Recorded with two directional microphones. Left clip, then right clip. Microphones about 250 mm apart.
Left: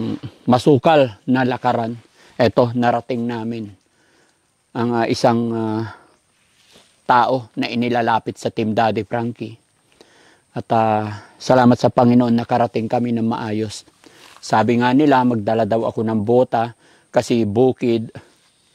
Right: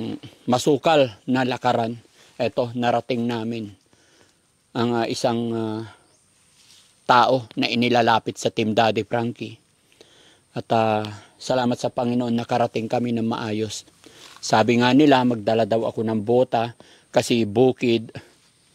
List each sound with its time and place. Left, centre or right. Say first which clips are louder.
0.0 s speech: left 6 dB; left
2.3 s speech: left 8 dB; left
2.9 s speech: left 2 dB; centre
4.7 s speech: left 4 dB; left
5.8 s speech: left 8 dB; left
7.1 s a man's voice: left 1 dB; centre